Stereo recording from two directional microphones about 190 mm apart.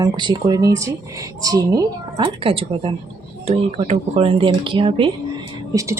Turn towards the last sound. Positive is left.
turn(degrees=-20)  # may be behind; listen again after turning